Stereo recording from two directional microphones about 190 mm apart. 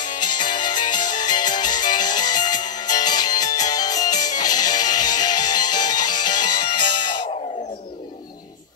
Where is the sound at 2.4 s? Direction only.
40° left (ahead or behind).